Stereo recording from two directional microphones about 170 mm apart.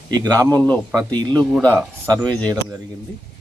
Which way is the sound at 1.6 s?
5° left (ahead or behind).